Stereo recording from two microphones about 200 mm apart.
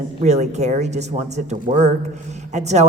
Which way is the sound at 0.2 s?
35° right (ahead or behind).